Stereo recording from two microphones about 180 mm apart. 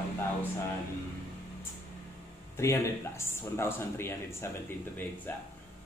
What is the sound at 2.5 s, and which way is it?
Speech, 15° left (ahead or behind).